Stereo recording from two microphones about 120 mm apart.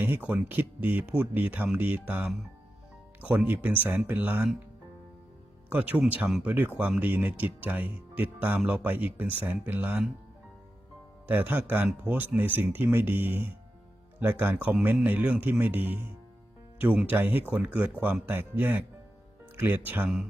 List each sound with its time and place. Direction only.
0.0 s speech: 15° right (ahead or behind)
5.6 s speech: 15° right (ahead or behind)
11.3 s speech: 15° right (ahead or behind)